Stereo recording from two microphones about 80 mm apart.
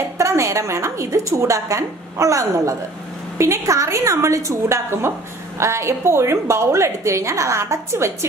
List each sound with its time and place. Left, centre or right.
0.2 s a woman's voice: right